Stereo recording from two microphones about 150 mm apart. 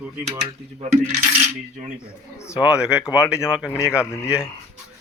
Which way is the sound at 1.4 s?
55° right (ahead or behind).